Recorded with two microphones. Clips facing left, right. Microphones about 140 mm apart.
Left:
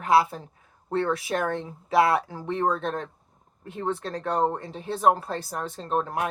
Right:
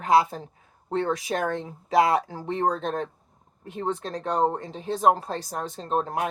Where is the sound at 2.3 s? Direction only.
30° right (ahead or behind).